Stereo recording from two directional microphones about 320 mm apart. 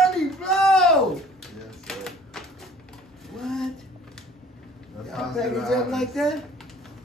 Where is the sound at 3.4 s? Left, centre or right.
Centre.